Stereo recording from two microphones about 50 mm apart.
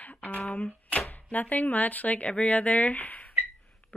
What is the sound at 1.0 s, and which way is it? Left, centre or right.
Speech, left.